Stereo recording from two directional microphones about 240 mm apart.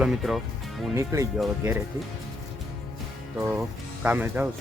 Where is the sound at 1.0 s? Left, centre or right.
Centre.